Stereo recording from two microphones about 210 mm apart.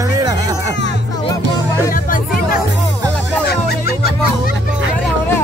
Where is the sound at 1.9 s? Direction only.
40° left (ahead or behind).